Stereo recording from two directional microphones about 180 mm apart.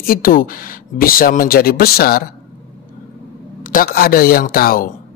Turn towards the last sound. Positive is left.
turn(degrees=55)  # may be behind; listen again after turning